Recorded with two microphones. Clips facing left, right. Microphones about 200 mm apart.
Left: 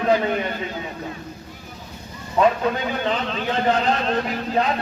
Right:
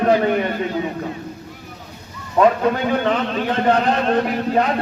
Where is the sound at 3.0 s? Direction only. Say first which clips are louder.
Right 4 dB; 50° right (ahead or behind).